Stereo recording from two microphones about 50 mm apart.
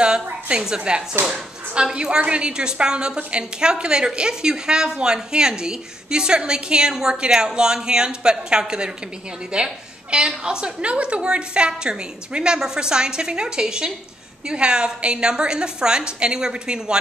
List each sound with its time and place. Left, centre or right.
0.0 s a woman's voice: centre